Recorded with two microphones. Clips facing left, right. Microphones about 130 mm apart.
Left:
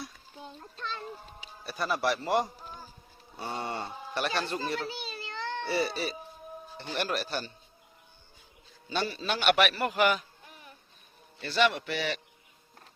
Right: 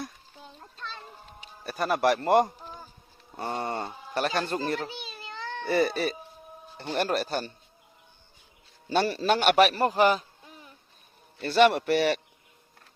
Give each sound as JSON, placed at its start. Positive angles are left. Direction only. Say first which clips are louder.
{"t": 1.6, "sound": "speech", "louder": "right 5 dB", "side_deg": -45}
{"t": 8.9, "sound": "a man's voice", "louder": "right 7 dB", "side_deg": -60}
{"t": 9.2, "sound": "a man's voice", "louder": "right 4 dB", "side_deg": -45}
{"t": 11.4, "sound": "speech", "louder": "right 6 dB", "side_deg": -50}